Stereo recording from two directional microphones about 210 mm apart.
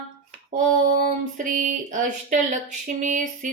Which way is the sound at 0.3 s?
35° right (ahead or behind).